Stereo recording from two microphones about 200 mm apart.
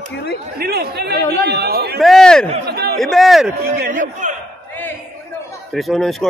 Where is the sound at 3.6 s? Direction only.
50° right (ahead or behind).